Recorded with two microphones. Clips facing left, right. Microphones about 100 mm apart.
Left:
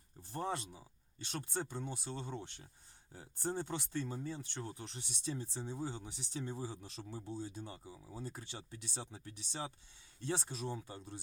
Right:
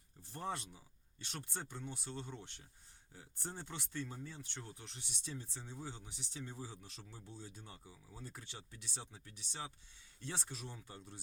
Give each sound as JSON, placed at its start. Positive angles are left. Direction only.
{"t": 0.3, "sound": "speech", "side_deg": 30}
{"t": 1.9, "sound": "speech", "side_deg": 30}
{"t": 3.1, "sound": "speech", "side_deg": 40}
{"t": 5.7, "sound": "speech", "side_deg": 40}